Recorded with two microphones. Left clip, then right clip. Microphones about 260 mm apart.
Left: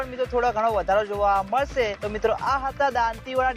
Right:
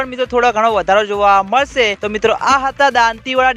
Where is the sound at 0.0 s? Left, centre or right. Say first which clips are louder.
Right 9 dB; right.